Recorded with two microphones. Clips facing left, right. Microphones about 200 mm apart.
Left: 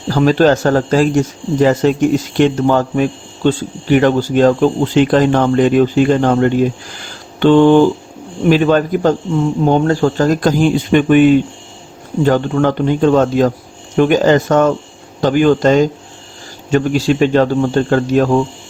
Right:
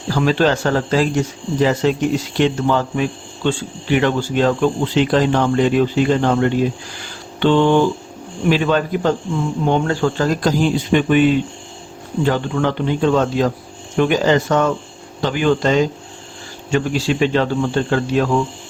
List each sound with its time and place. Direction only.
0.1 s a man's voice: 45° left (ahead or behind)